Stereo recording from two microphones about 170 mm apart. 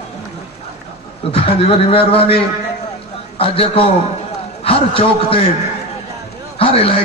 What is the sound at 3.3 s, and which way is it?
A man's voice, 35° left (ahead or behind).